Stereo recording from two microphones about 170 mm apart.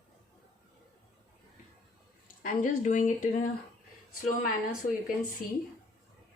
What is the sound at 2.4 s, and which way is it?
Speech, 50° left (ahead or behind).